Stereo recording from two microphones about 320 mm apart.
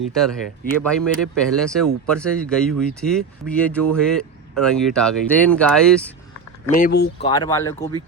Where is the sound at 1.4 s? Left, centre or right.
Centre.